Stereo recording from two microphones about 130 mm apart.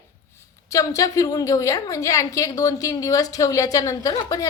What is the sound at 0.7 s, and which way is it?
A woman's voice, 25° left (ahead or behind).